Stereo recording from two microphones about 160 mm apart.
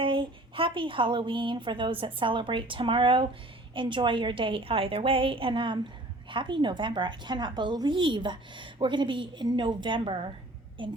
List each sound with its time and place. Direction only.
0.0 s a woman's voice: 30° right (ahead or behind)